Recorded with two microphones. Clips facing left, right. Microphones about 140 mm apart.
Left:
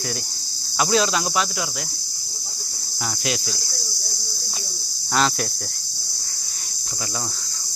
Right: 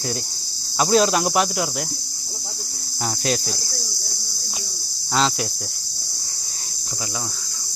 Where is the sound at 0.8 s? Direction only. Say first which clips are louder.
Right 3 dB; 40° right (ahead or behind).